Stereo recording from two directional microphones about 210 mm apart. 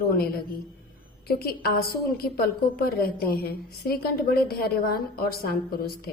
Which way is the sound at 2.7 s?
45° left (ahead or behind).